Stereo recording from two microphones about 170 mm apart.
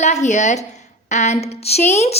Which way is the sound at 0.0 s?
45° left (ahead or behind).